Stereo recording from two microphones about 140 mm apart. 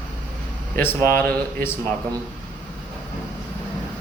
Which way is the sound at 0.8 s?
15° left (ahead or behind).